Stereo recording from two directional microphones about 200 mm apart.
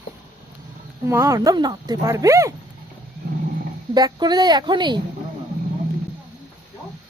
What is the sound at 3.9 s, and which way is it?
Speech, 20° right (ahead or behind).